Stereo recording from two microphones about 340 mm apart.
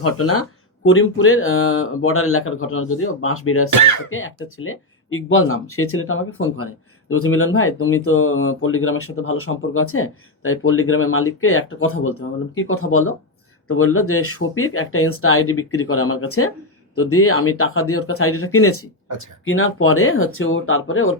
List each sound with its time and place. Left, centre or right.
0.0 s speech: left
3.7 s speech: right
4.1 s speech: left